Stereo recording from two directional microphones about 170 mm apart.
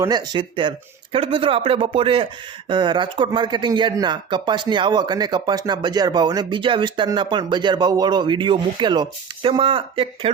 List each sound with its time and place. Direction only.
0.0 s speech: 25° right (ahead or behind)